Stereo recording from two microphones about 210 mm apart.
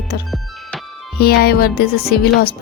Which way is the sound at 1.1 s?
45° left (ahead or behind).